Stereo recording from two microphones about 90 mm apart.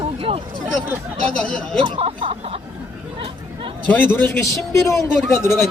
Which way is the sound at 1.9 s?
90° right.